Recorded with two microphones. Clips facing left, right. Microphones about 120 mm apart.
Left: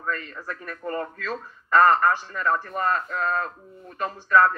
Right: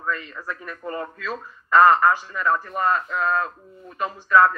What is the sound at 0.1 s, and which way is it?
Speech, 45° left (ahead or behind).